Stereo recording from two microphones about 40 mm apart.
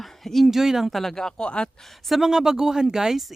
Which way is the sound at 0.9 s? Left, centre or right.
Centre.